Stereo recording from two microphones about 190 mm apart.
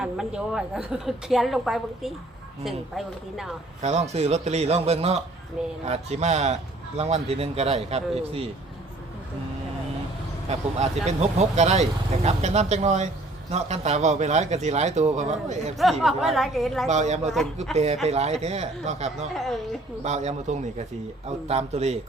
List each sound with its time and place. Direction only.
0.0 s a woman's voice: 5° right (ahead or behind)
3.8 s a man's voice: 35° right (ahead or behind)
11.0 s a man's voice: 35° right (ahead or behind)
15.8 s a woman's voice: centre (ahead or behind)
16.9 s a man's voice: 35° right (ahead or behind)
19.3 s a woman's voice: centre (ahead or behind)
20.1 s a man's voice: 35° right (ahead or behind)